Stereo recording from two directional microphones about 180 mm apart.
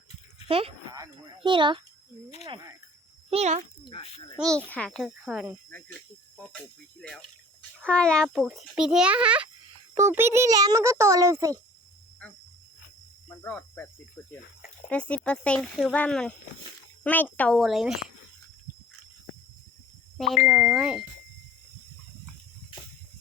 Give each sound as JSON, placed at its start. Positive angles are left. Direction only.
{"t": 0.4, "sound": "speech", "side_deg": -30}
{"t": 0.9, "sound": "a child's voice", "side_deg": -20}
{"t": 3.2, "sound": "speech", "side_deg": -35}
{"t": 3.8, "sound": "speech", "side_deg": 30}
{"t": 4.4, "sound": "a child's voice", "side_deg": 5}
{"t": 7.0, "sound": "a child's voice", "side_deg": 5}
{"t": 13.2, "sound": "a child's voice", "side_deg": 10}
{"t": 20.1, "sound": "a child's voice", "side_deg": 0}